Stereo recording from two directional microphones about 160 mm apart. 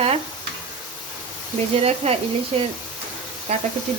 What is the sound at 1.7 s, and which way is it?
Speech, 40° right (ahead or behind).